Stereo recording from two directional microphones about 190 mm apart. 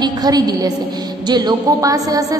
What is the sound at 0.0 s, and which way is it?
A woman's voice, 20° right (ahead or behind).